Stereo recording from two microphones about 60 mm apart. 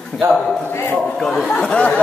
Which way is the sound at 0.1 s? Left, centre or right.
Centre.